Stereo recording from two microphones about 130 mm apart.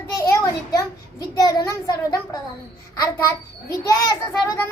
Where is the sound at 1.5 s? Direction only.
30° left (ahead or behind).